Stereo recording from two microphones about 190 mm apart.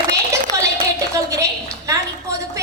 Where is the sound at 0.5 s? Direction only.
20° right (ahead or behind).